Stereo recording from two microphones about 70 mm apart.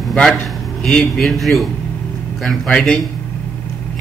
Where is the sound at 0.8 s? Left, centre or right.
Centre.